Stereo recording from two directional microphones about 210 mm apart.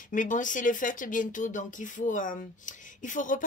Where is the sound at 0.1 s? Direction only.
40° left (ahead or behind).